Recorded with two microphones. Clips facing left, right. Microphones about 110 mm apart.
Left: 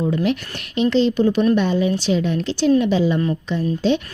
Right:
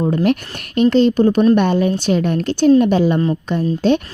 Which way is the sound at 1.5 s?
60° right (ahead or behind).